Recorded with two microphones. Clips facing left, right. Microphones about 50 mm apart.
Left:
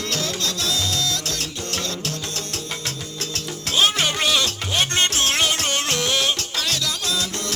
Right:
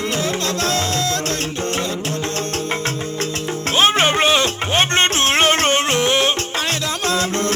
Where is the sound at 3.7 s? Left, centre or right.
Right.